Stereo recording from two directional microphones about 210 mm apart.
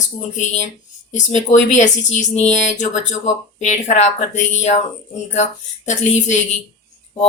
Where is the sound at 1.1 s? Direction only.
35° left (ahead or behind).